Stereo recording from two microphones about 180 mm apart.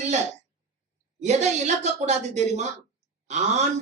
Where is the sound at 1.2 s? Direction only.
40° right (ahead or behind).